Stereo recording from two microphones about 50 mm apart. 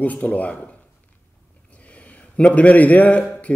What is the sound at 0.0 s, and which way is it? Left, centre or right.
A man's voice, left.